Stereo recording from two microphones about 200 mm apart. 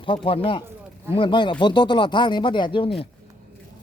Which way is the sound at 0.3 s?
25° left (ahead or behind).